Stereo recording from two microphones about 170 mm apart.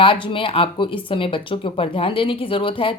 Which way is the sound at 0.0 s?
30° left (ahead or behind).